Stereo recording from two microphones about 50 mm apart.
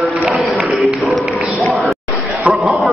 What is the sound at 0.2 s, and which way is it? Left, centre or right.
Speech, right.